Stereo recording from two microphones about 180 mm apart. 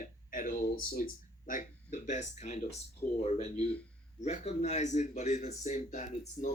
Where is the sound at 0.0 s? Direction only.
50° left (ahead or behind).